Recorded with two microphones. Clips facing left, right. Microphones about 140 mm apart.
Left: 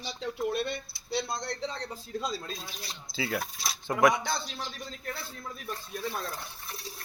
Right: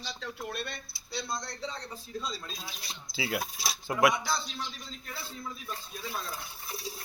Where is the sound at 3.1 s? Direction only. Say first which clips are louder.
Left 1 dB; 10° right (ahead or behind).